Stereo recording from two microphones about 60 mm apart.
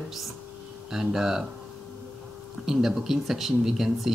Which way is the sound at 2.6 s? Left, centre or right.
Centre.